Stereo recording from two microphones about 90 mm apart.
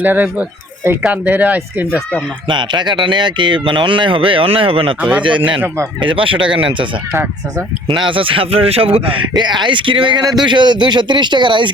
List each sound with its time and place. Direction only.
0.0 s speech: 20° right (ahead or behind)
2.5 s speech: 60° right (ahead or behind); by 4.9 s 85° right
4.9 s speech: 15° right (ahead or behind)
5.6 s speech: 30° right (ahead or behind)
6.0 s speech: 70° right (ahead or behind)
7.9 s speech: 70° right (ahead or behind); by 9.2 s 90° right
9.3 s speech: 55° right (ahead or behind)
10.2 s speech: 55° right (ahead or behind)